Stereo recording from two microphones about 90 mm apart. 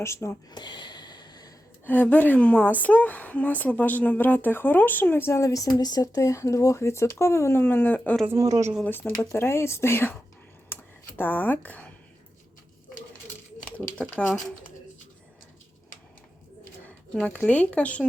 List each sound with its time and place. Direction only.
0.0 s speech: 30° left (ahead or behind)
0.5 s a sound: 55° left (ahead or behind)
1.8 s a woman's voice: 20° left (ahead or behind)
8.4 s a woman's voice: 40° right (ahead or behind)
8.8 s speech: 20° left (ahead or behind)
10.7 s computer keyboard: 25° left (ahead or behind)
11.2 s speech: 20° left (ahead or behind)
13.7 s a woman's voice: 15° left (ahead or behind)
17.2 s a woman's voice: 15° left (ahead or behind)